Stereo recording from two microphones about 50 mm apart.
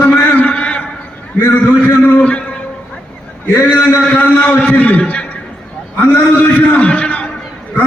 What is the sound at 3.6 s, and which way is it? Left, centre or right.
Speech, left.